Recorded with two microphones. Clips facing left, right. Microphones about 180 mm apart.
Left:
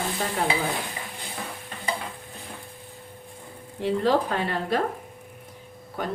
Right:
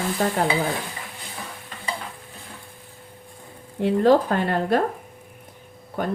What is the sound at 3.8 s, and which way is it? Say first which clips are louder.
A woman's voice: right 5 dB; 50° right (ahead or behind).